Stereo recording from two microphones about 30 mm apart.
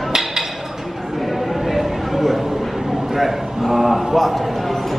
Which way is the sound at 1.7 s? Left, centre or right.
Centre.